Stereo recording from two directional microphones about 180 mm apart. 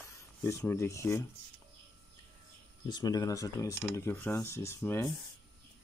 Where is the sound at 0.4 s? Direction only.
15° left (ahead or behind).